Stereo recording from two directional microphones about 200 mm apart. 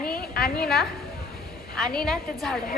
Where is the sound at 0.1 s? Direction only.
50° left (ahead or behind).